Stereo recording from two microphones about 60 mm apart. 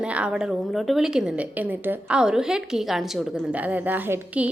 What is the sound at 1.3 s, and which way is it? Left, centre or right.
Speech, right.